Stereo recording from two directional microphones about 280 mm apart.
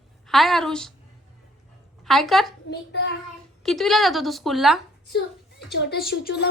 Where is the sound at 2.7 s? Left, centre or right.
Left.